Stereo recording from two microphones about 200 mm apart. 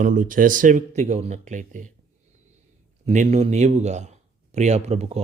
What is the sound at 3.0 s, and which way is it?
A man's voice, 35° right (ahead or behind).